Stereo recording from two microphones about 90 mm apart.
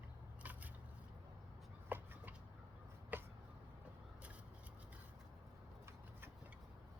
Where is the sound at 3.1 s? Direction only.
20° right (ahead or behind).